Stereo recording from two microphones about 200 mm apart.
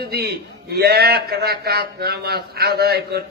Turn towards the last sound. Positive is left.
turn(degrees=-55)  # may be behind; listen again after turning